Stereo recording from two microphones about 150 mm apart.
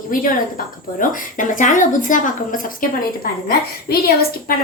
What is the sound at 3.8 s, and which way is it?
Speech, 90° left.